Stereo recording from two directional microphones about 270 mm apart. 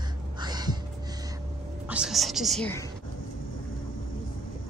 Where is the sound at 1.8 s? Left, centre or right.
Centre.